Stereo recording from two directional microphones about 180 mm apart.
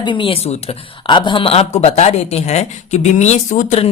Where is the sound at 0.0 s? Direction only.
30° left (ahead or behind).